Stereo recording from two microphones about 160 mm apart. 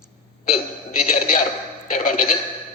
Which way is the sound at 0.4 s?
60° left (ahead or behind).